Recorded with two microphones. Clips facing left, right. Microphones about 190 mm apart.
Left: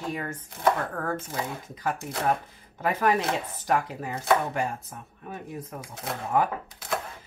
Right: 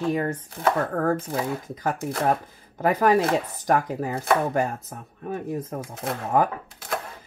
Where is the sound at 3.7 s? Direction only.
45° right (ahead or behind).